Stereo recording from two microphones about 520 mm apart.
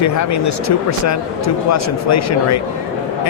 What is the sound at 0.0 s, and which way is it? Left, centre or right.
Speech, left.